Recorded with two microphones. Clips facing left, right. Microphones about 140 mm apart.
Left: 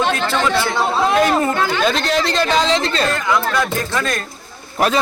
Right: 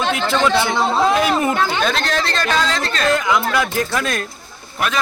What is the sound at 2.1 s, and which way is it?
Speech, 15° left (ahead or behind).